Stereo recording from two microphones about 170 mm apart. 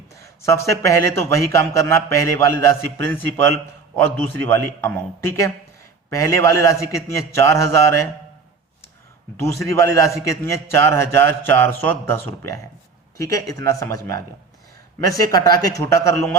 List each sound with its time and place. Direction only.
0.4 s a man's voice: 15° left (ahead or behind)
9.4 s a man's voice: 20° left (ahead or behind)